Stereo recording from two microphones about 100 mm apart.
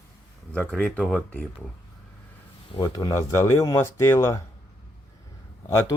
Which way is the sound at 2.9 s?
35° left (ahead or behind).